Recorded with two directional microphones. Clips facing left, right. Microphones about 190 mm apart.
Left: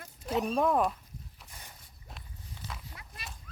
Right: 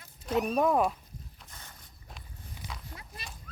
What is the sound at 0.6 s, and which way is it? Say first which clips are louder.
Speech: right 1 dB; 5° right (ahead or behind).